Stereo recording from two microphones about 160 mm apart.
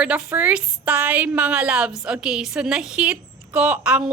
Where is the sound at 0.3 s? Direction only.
10° right (ahead or behind).